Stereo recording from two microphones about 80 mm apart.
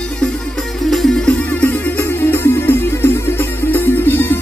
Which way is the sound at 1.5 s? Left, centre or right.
Centre.